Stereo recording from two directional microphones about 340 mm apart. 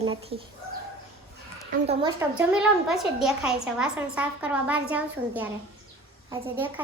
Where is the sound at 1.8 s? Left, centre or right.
Centre.